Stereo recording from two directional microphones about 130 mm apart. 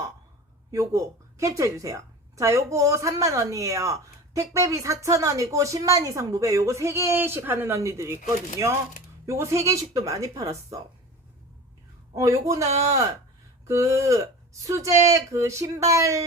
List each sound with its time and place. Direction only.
0.7 s a woman's voice: 25° right (ahead or behind)
8.2 s speech: 80° left
9.2 s a woman's voice: 25° right (ahead or behind)
12.1 s a woman's voice: 25° right (ahead or behind)